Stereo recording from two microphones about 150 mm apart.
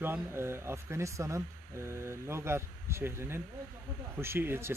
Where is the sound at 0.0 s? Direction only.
15° right (ahead or behind).